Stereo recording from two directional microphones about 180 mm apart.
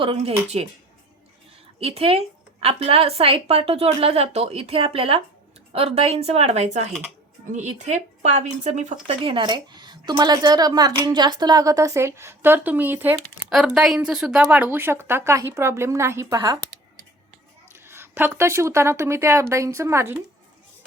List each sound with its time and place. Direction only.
0.0 s a woman's voice: 30° right (ahead or behind)
1.8 s a woman's voice: 35° right (ahead or behind)
17.8 s a woman's voice: 15° right (ahead or behind)